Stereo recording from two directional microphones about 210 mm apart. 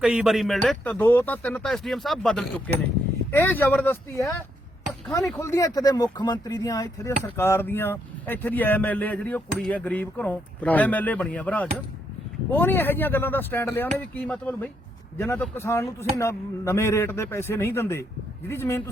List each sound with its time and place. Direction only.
0.0 s speech: 5° right (ahead or behind); by 18.8 s 10° left (ahead or behind)